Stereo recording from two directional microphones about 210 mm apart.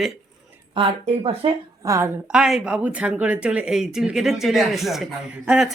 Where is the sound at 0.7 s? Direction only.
25° right (ahead or behind).